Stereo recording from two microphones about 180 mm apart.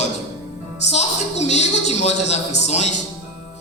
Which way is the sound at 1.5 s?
40° left (ahead or behind).